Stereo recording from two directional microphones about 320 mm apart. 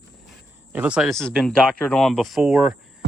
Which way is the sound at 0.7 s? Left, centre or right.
Centre.